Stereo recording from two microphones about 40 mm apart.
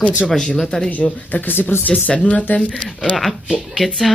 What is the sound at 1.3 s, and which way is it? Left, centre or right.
Speech, left.